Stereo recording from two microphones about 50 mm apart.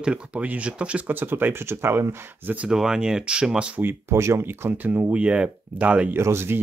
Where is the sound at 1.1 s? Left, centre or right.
Right.